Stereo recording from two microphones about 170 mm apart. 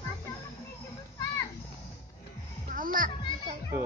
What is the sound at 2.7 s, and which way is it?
Music, 55° right (ahead or behind).